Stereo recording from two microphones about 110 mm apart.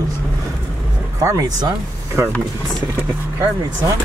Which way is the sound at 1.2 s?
30° right (ahead or behind).